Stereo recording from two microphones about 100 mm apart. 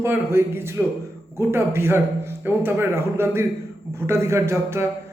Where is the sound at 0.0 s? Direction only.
25° right (ahead or behind).